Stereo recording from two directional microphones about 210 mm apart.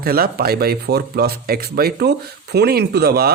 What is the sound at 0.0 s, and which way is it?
Speech, 45° right (ahead or behind).